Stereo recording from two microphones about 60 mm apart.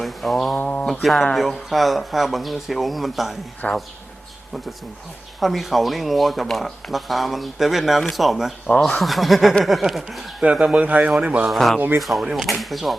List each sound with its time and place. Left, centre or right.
0.0 s mantra: centre
0.9 s speech: centre
3.6 s speech: left
5.4 s speech: centre
8.6 s speech: centre
10.4 s speech: centre
11.4 s speech: centre